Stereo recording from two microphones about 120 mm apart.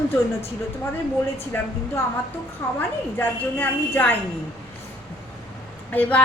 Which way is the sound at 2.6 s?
20° left (ahead or behind).